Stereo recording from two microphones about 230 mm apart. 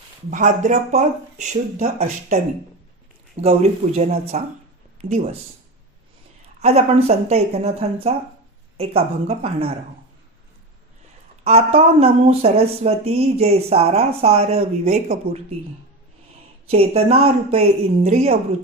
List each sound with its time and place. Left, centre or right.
0.3 s speech: right
3.4 s speech: right
6.6 s speech: right
11.4 s speech: right
16.6 s speech: right